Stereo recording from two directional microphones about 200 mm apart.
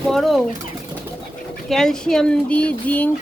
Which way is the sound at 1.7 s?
Centre (ahead or behind).